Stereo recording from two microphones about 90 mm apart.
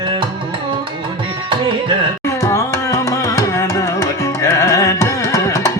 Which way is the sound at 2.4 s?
35° left (ahead or behind).